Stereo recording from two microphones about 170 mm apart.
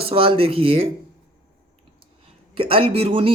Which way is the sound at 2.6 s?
35° right (ahead or behind).